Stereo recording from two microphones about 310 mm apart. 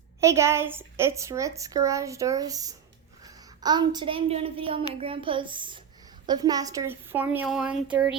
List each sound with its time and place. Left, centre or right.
0.2 s a woman's voice: centre